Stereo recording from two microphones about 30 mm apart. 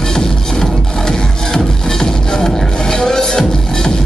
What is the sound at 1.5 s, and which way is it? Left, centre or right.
Music, centre.